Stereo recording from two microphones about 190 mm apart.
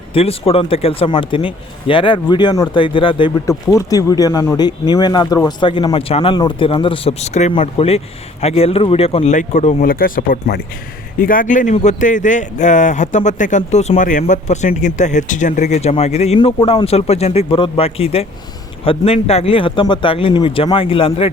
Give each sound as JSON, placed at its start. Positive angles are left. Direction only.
{"t": 0.1, "sound": "speech", "side_deg": 30}